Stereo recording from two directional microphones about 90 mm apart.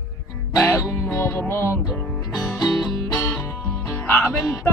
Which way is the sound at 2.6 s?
35° left (ahead or behind).